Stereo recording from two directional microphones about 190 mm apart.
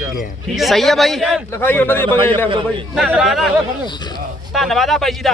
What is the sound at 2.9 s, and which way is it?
Speech, 5° right (ahead or behind).